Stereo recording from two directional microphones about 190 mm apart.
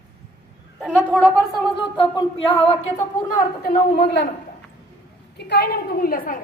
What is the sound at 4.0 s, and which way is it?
Speech, 65° left (ahead or behind).